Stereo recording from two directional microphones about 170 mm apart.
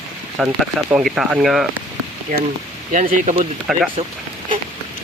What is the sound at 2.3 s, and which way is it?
Speech, 55° right (ahead or behind).